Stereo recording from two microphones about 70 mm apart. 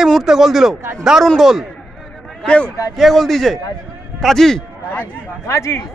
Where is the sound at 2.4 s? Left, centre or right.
Centre.